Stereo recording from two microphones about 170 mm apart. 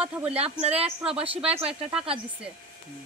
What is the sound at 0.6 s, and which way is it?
Speech, 35° right (ahead or behind).